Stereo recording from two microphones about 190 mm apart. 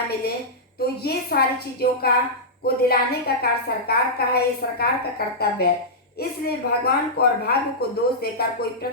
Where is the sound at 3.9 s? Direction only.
55° left (ahead or behind).